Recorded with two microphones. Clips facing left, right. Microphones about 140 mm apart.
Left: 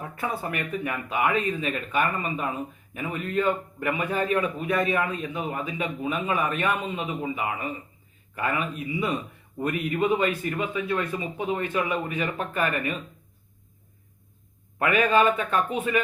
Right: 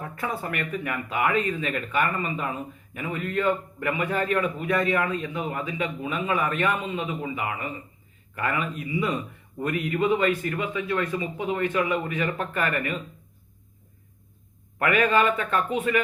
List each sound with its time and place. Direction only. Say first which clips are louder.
0.0 s speech: even; 20° left (ahead or behind)
14.8 s speech: even; 20° left (ahead or behind)